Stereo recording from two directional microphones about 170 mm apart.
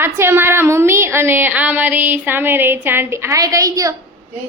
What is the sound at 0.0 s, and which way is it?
A woman's voice, 15° right (ahead or behind).